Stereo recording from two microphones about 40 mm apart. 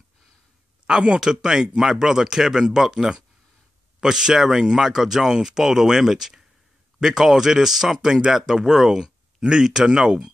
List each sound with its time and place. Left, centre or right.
0.8 s speech: right
1.2 s speech: centre